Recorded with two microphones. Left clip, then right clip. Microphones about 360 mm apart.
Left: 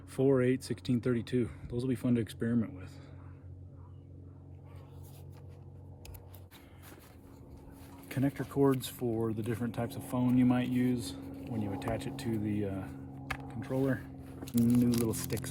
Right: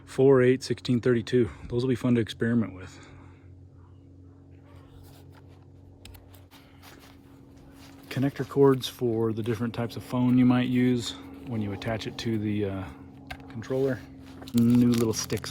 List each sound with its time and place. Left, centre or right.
0.1 s speech: centre
8.0 s speech: centre